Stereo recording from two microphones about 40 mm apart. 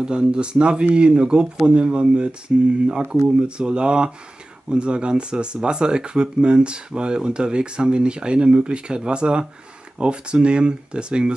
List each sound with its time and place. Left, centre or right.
0.0 s speech: right